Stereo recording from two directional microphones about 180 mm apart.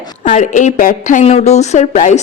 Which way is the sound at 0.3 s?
40° left (ahead or behind).